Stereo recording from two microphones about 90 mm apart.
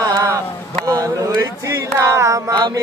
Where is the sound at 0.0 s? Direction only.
40° right (ahead or behind).